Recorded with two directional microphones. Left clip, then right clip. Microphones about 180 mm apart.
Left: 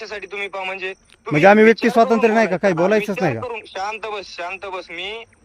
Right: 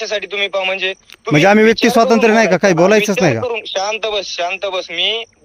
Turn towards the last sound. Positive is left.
turn(degrees=-5)  # may be behind; listen again after turning